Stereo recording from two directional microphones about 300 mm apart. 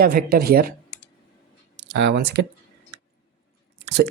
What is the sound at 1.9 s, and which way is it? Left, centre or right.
Speech, right.